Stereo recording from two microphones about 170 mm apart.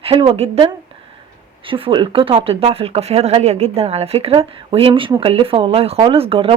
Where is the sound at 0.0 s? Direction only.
30° right (ahead or behind).